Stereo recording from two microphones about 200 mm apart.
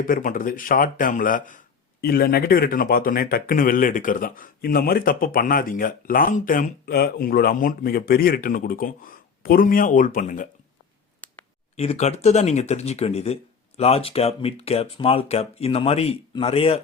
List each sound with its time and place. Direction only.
0.0 s speech: 45° left (ahead or behind)
11.2 s clicking: 10° left (ahead or behind)
11.8 s speech: 30° left (ahead or behind)